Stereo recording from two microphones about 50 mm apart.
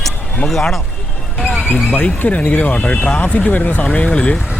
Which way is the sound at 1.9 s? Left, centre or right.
Left.